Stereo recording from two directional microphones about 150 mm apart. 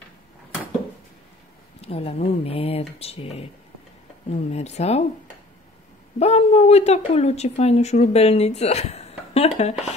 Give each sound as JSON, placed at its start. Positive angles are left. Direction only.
{"t": 1.8, "sound": "speech", "side_deg": 40}
{"t": 6.1, "sound": "speech", "side_deg": 45}